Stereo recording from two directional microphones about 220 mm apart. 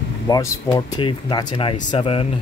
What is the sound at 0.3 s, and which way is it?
Speech, 20° left (ahead or behind).